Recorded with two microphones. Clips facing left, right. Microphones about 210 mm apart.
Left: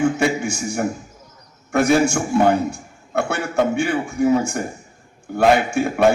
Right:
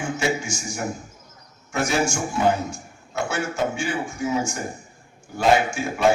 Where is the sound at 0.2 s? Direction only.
60° left (ahead or behind).